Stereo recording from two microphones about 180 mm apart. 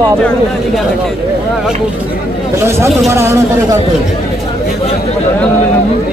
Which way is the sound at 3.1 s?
15° right (ahead or behind).